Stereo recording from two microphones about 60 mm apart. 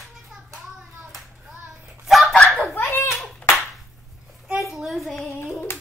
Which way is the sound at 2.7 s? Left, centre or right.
Left.